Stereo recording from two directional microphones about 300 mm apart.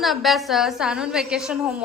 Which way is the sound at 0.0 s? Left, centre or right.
Centre.